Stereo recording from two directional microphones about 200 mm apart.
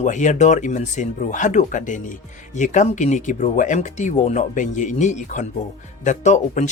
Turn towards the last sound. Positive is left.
turn(degrees=35)  # may be behind; listen again after turning